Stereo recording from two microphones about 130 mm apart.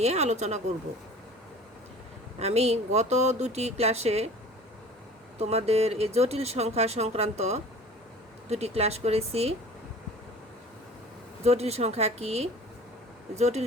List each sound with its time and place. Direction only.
0.0 s a woman's voice: 60° right (ahead or behind)
2.4 s a woman's voice: 55° right (ahead or behind)
5.4 s a woman's voice: 55° right (ahead or behind)
11.4 s a woman's voice: 55° right (ahead or behind)